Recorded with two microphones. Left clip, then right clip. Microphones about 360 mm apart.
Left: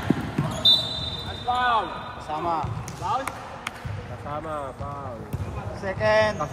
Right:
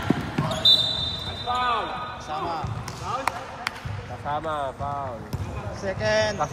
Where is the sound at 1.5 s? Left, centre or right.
Centre.